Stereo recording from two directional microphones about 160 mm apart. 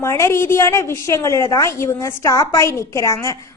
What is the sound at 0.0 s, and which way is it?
A woman's voice, 15° left (ahead or behind).